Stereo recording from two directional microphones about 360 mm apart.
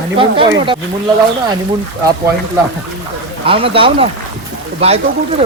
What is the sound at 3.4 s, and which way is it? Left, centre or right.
A man's voice, centre.